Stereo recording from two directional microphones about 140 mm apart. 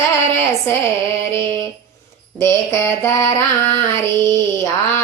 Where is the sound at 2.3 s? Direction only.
20° left (ahead or behind).